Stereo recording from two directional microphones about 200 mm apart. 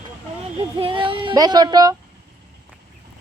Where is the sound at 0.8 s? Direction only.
25° right (ahead or behind).